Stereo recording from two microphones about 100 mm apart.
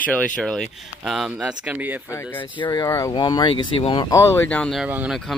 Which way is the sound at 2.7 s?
35° left (ahead or behind).